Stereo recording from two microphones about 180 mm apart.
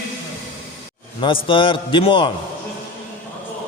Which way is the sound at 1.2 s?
30° left (ahead or behind).